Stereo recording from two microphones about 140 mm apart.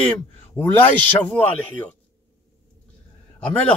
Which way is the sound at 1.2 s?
10° left (ahead or behind).